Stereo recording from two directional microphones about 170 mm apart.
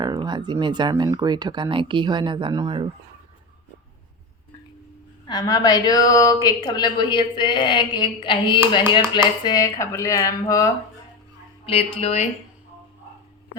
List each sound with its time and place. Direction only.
0.0 s speech: 25° right (ahead or behind)
5.3 s a woman's voice: 20° left (ahead or behind)
11.6 s speech: 35° left (ahead or behind)